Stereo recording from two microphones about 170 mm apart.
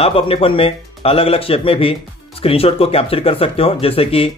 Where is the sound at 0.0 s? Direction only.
35° left (ahead or behind).